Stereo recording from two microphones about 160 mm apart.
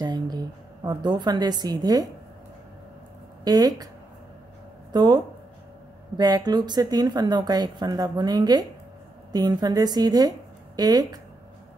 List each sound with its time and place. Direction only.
0.0 s a sound: 25° right (ahead or behind)
0.8 s a woman's voice: 25° right (ahead or behind)
3.4 s a woman's voice: 25° right (ahead or behind)
4.9 s a woman's voice: 25° right (ahead or behind)